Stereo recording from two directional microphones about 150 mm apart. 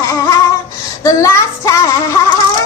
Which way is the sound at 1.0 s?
20° left (ahead or behind).